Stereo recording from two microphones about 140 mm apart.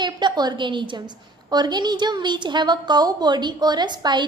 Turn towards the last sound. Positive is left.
turn(degrees=-30)  # may be behind; listen again after turning